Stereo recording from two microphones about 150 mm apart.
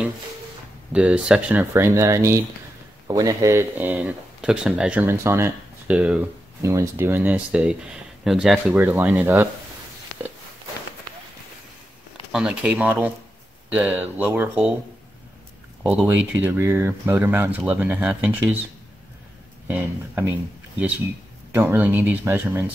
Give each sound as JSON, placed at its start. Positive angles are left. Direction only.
{"t": 0.9, "sound": "speech", "side_deg": -5}
{"t": 5.0, "sound": "speech", "side_deg": -20}
{"t": 6.6, "sound": "speech", "side_deg": -20}
{"t": 12.3, "sound": "speech", "side_deg": -5}
{"t": 16.1, "sound": "speech", "side_deg": -15}
{"t": 19.7, "sound": "speech", "side_deg": -15}
{"t": 21.5, "sound": "speech", "side_deg": -15}